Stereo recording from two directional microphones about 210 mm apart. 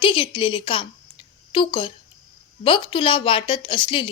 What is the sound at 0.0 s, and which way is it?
A woman's voice, 25° left (ahead or behind).